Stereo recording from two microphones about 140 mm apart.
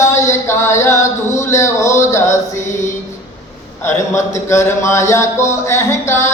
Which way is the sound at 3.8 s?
20° left (ahead or behind).